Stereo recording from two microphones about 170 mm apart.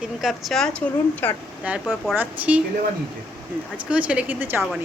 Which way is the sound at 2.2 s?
10° right (ahead or behind).